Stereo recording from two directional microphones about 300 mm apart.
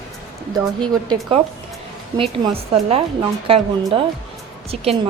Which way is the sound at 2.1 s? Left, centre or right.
Centre.